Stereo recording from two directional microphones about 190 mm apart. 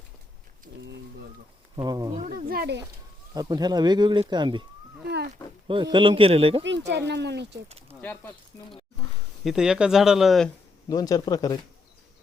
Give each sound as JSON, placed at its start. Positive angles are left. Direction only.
{"t": 1.7, "sound": "speech", "side_deg": -20}
{"t": 2.2, "sound": "speech", "side_deg": -50}
{"t": 3.3, "sound": "speech", "side_deg": -20}
{"t": 5.6, "sound": "speech", "side_deg": -25}
{"t": 6.6, "sound": "speech", "side_deg": -65}
{"t": 8.0, "sound": "speech", "side_deg": 10}
{"t": 9.4, "sound": "speech", "side_deg": 0}
{"t": 10.8, "sound": "speech", "side_deg": 20}